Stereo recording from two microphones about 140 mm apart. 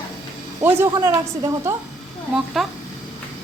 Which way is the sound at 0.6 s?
15° right (ahead or behind).